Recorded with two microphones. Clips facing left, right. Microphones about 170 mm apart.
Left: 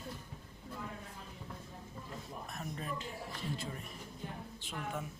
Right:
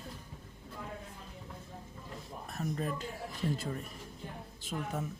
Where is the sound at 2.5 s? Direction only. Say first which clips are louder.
Right 7 dB; 40° right (ahead or behind).